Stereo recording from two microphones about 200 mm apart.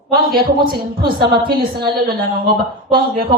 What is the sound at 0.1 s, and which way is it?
A woman's voice, 50° right (ahead or behind).